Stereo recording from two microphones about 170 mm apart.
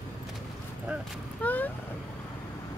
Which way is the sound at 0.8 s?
5° right (ahead or behind).